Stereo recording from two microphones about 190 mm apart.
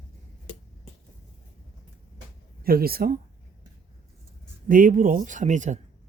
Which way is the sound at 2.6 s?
50° right (ahead or behind).